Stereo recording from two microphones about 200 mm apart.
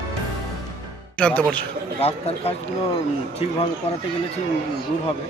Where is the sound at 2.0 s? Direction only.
30° left (ahead or behind).